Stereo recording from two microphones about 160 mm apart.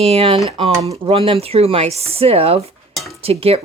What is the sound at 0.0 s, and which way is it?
Speech, 40° right (ahead or behind).